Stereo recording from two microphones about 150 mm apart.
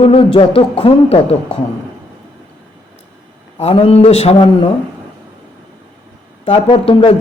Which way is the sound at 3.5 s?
45° left (ahead or behind).